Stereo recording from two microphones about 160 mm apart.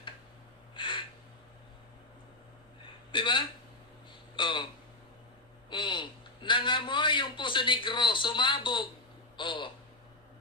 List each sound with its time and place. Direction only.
0.7 s gasp: 30° left (ahead or behind)
3.1 s a man's voice: 30° left (ahead or behind)
5.7 s a man's voice: 30° left (ahead or behind)